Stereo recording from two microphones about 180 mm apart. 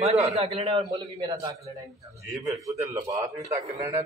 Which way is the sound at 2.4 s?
20° right (ahead or behind).